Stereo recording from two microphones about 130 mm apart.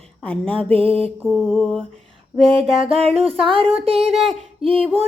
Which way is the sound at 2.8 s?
50° right (ahead or behind).